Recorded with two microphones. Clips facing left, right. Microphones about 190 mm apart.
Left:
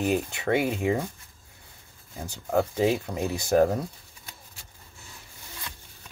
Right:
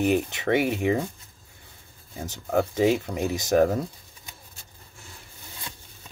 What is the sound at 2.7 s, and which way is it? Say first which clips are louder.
Speech: right 2 dB; 20° right (ahead or behind).